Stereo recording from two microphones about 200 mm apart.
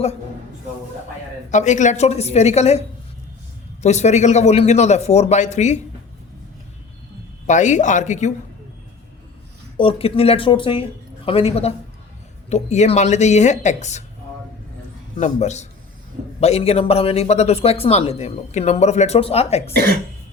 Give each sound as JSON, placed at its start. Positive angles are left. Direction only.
{"t": 1.5, "sound": "speech", "side_deg": 35}
{"t": 3.8, "sound": "speech", "side_deg": 35}
{"t": 7.4, "sound": "speech", "side_deg": 35}
{"t": 9.7, "sound": "speech", "side_deg": 25}
{"t": 15.2, "sound": "speech", "side_deg": 35}
{"t": 19.7, "sound": "speech", "side_deg": -50}